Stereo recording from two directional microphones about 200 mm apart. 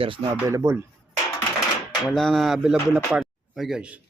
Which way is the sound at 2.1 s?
Centre (ahead or behind).